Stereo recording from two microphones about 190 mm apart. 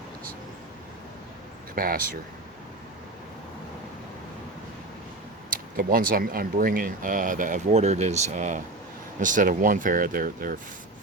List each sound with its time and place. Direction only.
1.7 s speech: 50° right (ahead or behind)
5.5 s speech: 50° right (ahead or behind)